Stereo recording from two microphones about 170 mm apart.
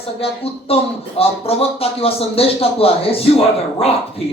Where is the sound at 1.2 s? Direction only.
35° left (ahead or behind).